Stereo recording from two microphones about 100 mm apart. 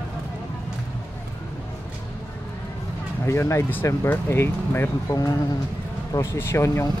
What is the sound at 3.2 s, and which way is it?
Speech, 30° left (ahead or behind).